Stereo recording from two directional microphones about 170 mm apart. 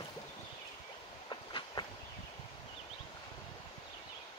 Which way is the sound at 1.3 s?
25° left (ahead or behind).